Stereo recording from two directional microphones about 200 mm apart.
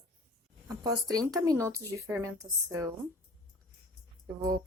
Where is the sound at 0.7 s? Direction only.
20° right (ahead or behind).